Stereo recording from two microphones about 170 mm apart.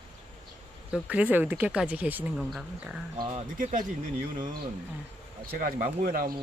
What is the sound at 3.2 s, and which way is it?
Speech, 35° right (ahead or behind).